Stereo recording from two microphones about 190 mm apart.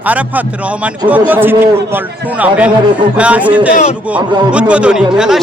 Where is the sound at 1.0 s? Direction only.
10° right (ahead or behind).